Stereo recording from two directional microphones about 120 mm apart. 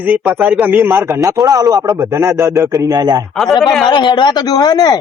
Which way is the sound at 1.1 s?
35° right (ahead or behind).